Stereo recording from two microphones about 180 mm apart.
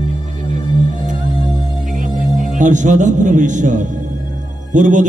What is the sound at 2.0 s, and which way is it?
Music, 45° right (ahead or behind).